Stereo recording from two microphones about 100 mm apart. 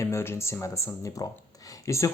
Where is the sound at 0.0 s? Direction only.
25° left (ahead or behind).